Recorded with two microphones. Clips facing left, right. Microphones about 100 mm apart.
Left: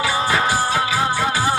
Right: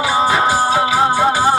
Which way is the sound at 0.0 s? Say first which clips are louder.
Right 5 dB; 25° right (ahead or behind).